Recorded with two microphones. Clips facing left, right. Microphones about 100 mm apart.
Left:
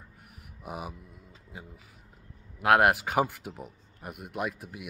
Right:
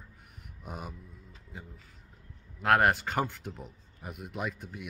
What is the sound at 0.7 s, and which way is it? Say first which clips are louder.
Speech: left 4 dB; 5° left (ahead or behind).